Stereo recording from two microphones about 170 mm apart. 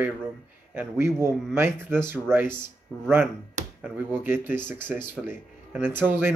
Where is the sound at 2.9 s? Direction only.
5° left (ahead or behind).